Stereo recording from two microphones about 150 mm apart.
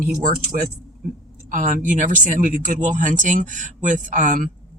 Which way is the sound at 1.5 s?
60° right (ahead or behind).